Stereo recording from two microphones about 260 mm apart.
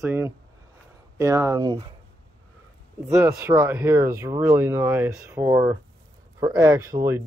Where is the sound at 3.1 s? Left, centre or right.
Centre.